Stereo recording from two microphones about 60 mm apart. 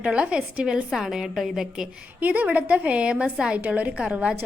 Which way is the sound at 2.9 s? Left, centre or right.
Centre.